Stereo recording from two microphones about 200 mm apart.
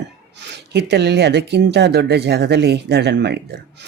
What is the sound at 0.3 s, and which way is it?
Speech, 60° right (ahead or behind).